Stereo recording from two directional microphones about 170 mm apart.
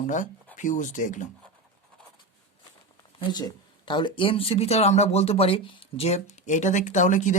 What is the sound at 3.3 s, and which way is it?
Speech, 25° left (ahead or behind).